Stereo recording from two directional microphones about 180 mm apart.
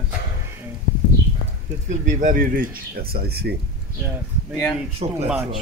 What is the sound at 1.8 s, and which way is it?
Speech, 45° right (ahead or behind).